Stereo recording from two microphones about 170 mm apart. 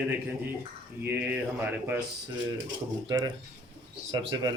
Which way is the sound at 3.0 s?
25° right (ahead or behind).